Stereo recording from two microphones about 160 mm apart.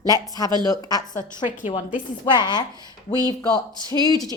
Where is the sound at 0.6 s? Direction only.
25° left (ahead or behind).